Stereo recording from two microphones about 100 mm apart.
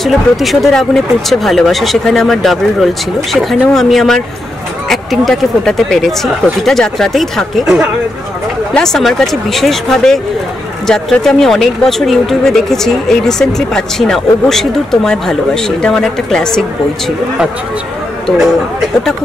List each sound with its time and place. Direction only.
0.0 s speech: centre (ahead or behind)
8.7 s speech: 5° left (ahead or behind)